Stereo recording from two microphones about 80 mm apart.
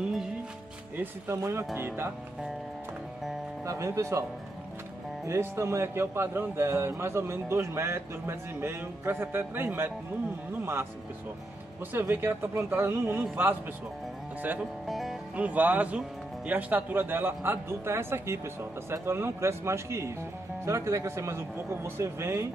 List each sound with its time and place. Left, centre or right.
1.3 s a man's voice: right
3.6 s speech: right
5.2 s speech: right
11.9 s a man's voice: right
14.9 s music: centre
15.3 s a man's voice: centre; by 22.5 s right